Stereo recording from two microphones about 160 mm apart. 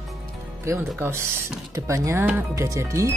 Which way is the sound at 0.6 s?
15° right (ahead or behind).